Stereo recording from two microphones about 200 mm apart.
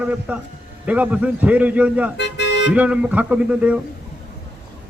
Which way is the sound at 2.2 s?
60° left (ahead or behind).